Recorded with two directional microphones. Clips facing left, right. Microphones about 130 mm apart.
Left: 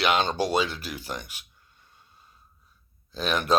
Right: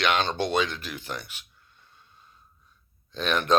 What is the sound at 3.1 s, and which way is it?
Speech, 5° left (ahead or behind).